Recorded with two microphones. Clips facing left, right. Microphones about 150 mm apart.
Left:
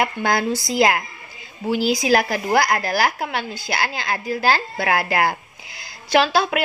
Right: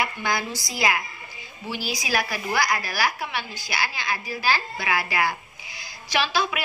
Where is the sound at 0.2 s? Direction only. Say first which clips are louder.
Left 7 dB; 55° left (ahead or behind).